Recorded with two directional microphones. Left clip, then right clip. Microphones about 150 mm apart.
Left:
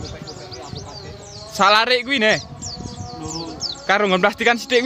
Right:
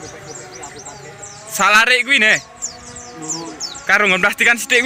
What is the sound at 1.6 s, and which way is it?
Speech, 30° left (ahead or behind).